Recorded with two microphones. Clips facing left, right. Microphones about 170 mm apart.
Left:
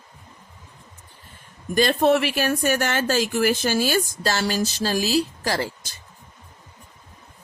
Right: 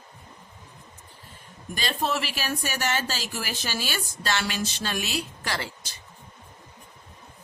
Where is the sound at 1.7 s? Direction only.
55° left (ahead or behind).